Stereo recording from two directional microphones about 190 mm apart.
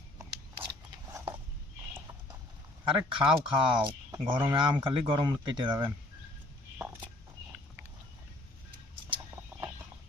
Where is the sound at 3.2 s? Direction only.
25° right (ahead or behind).